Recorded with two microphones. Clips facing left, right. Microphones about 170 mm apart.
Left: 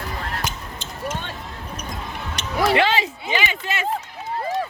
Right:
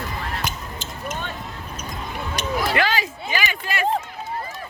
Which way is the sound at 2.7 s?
25° left (ahead or behind).